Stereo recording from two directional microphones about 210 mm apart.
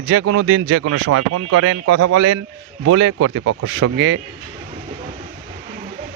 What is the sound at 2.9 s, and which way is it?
Speech, 85° right.